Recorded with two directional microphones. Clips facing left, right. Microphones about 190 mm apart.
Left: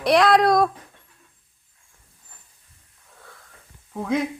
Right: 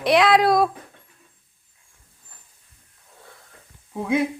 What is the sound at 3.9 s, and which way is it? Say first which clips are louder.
Speech: right 2 dB; 10° right (ahead or behind).